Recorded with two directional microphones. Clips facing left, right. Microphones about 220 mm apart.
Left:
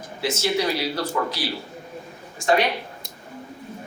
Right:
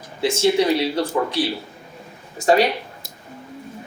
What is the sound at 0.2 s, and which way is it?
Speech, 30° right (ahead or behind).